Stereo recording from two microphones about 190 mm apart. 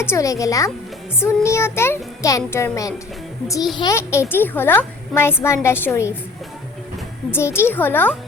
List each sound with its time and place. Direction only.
0.0 s a woman's voice: 15° left (ahead or behind)
7.3 s a woman's voice: 15° left (ahead or behind)